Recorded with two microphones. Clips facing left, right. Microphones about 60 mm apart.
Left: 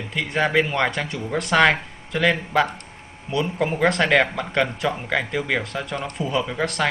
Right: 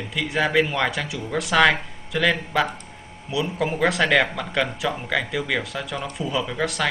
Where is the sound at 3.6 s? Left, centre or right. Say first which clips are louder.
Left 1 dB; centre.